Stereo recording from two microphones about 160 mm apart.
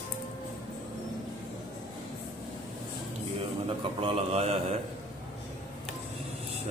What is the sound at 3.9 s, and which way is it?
Speech, 40° right (ahead or behind).